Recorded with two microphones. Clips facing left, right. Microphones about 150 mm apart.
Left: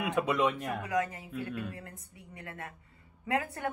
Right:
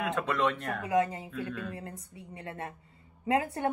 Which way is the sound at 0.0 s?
10° left (ahead or behind).